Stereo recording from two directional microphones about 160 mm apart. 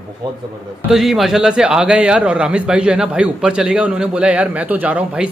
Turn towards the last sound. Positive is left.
turn(degrees=-5)  # may be behind; listen again after turning